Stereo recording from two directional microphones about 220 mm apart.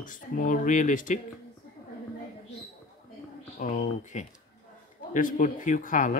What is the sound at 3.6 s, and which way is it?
Speech, 35° left (ahead or behind).